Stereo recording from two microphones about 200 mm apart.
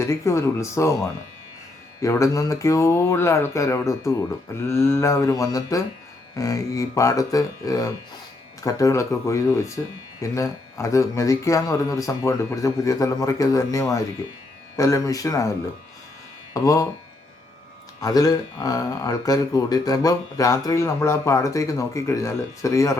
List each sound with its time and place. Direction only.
0.0 s speech: 15° left (ahead or behind)
2.0 s speech: 15° left (ahead or behind)
16.6 s speech: 15° left (ahead or behind)
18.0 s speech: 20° left (ahead or behind)